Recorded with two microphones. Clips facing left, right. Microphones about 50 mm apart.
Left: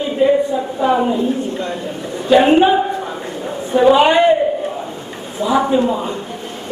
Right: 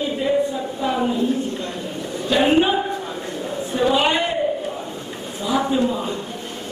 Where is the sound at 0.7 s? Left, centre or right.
Left.